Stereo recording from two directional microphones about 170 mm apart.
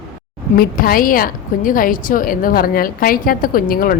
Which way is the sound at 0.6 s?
60° left (ahead or behind).